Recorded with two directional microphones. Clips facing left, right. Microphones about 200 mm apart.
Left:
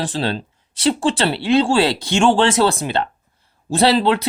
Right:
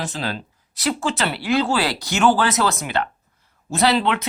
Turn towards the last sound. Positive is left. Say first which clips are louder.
# left 4 dB
turn(degrees=35)  # may be behind; listen again after turning